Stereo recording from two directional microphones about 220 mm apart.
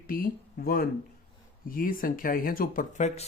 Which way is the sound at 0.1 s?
40° left (ahead or behind).